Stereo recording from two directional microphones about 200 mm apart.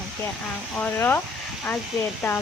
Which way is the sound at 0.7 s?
10° left (ahead or behind).